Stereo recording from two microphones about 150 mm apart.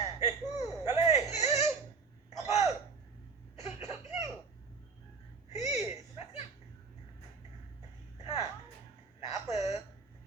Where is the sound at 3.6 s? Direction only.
45° left (ahead or behind).